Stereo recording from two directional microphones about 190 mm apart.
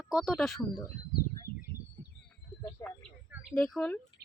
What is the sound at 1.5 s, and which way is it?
Bird, 55° left (ahead or behind).